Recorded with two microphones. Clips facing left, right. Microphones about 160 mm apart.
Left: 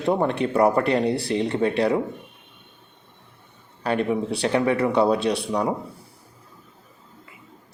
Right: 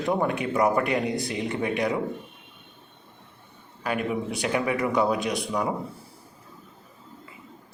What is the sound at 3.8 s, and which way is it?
Speech, 30° left (ahead or behind).